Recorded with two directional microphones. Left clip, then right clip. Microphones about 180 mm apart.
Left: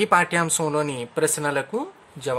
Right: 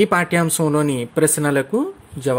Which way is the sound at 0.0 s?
10° right (ahead or behind).